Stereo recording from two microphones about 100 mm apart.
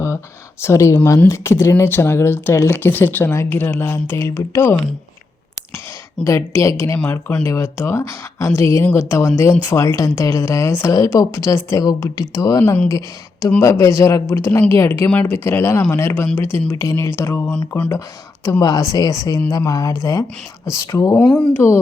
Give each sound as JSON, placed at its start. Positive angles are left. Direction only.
{"t": 0.6, "sound": "speech", "side_deg": 30}
{"t": 6.2, "sound": "speech", "side_deg": 30}
{"t": 7.0, "sound": "speech", "side_deg": 15}
{"t": 7.4, "sound": "speech", "side_deg": 30}
{"t": 10.9, "sound": "a woman's voice", "side_deg": 35}
{"t": 15.4, "sound": "speech", "side_deg": 25}
{"t": 18.6, "sound": "speech", "side_deg": 40}
{"t": 21.2, "sound": "speech", "side_deg": 10}